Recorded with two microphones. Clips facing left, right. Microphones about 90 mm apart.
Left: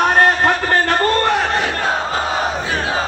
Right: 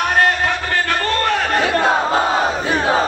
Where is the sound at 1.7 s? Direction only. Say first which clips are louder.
Right 4 dB; 15° right (ahead or behind).